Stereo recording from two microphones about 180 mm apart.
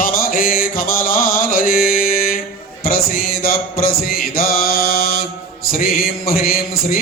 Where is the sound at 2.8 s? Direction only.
55° left (ahead or behind).